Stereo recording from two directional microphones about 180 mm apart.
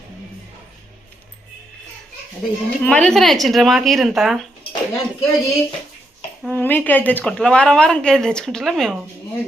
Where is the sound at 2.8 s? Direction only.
5° left (ahead or behind).